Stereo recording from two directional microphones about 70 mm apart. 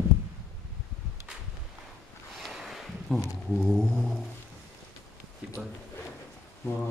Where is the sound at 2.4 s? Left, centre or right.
Centre.